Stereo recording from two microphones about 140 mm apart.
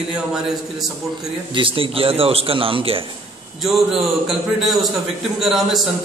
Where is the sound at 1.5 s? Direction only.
40° right (ahead or behind).